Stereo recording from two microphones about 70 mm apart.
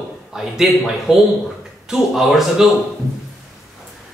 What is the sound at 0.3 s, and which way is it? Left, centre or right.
A woman's voice, centre.